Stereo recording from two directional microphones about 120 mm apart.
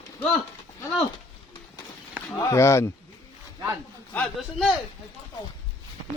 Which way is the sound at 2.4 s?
25° left (ahead or behind).